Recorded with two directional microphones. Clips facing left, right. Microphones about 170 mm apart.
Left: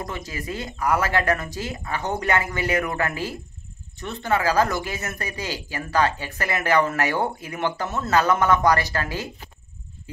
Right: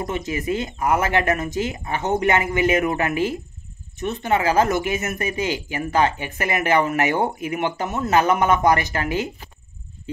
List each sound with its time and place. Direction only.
0.0 s speech: 20° right (ahead or behind)